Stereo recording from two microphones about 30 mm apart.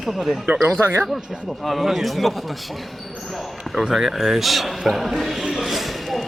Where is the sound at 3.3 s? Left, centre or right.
Centre.